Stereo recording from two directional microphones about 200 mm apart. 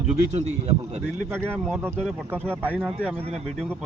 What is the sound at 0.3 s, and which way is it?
Speech, 35° right (ahead or behind).